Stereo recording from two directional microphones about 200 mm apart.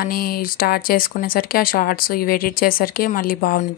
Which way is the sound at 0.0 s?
50° left (ahead or behind).